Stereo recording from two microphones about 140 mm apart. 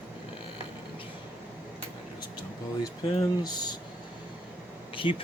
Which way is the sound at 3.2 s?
30° left (ahead or behind).